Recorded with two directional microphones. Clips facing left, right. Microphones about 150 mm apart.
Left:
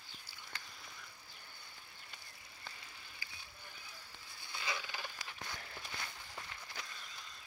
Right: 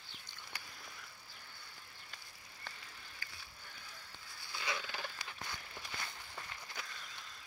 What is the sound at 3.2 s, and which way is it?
Bicycle, 10° left (ahead or behind).